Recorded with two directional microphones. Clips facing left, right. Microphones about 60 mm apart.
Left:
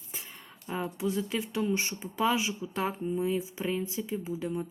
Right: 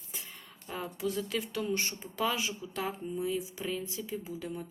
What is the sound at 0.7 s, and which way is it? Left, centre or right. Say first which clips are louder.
Speech: left 3 dB; centre.